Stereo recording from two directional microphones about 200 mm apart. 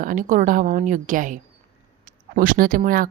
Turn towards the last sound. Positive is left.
turn(degrees=-45)  # may be behind; listen again after turning